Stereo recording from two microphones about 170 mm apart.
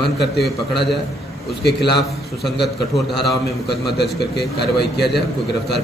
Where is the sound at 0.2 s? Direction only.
75° left (ahead or behind).